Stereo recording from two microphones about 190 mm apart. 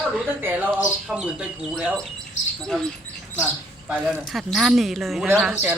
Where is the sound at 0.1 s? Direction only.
5° right (ahead or behind).